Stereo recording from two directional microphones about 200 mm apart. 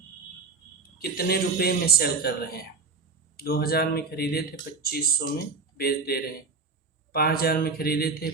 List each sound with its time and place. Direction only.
0.8 s a man's voice: 50° left (ahead or behind)